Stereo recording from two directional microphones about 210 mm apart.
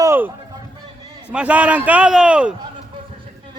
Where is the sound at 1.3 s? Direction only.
5° right (ahead or behind).